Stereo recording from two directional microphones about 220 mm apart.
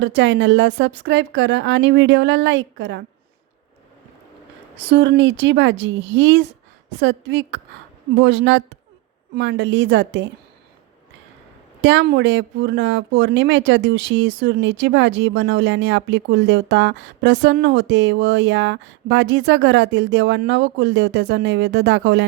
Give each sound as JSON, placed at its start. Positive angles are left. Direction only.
{"t": 0.0, "sound": "a woman's voice", "side_deg": -55}
{"t": 4.9, "sound": "a woman's voice", "side_deg": -55}
{"t": 11.8, "sound": "speech", "side_deg": -55}